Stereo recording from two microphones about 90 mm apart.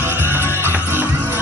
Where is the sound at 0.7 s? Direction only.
20° right (ahead or behind).